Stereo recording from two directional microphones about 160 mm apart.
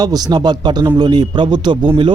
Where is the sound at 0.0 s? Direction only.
25° right (ahead or behind).